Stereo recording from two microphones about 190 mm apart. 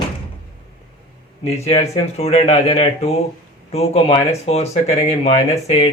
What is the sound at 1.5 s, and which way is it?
Speech, 35° left (ahead or behind).